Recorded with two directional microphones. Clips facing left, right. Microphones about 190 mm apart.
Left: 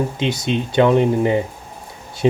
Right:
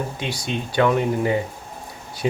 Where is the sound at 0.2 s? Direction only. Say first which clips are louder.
Left 7 dB; 20° left (ahead or behind).